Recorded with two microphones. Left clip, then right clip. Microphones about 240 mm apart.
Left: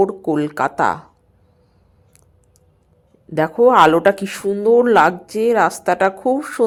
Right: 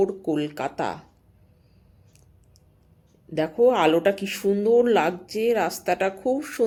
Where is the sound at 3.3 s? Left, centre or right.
Centre.